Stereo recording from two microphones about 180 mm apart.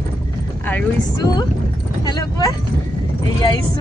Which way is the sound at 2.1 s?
20° left (ahead or behind).